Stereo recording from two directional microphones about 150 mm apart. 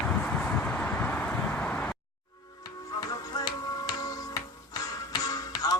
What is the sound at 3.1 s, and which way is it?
Music, 25° left (ahead or behind).